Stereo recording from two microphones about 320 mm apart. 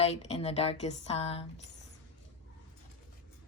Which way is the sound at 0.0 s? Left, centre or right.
Centre.